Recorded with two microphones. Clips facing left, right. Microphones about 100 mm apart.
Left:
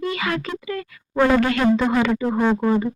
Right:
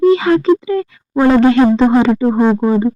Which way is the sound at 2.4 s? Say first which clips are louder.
Right 7 dB; 20° right (ahead or behind).